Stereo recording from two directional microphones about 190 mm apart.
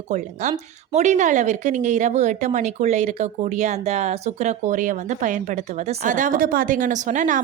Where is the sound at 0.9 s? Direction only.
40° right (ahead or behind).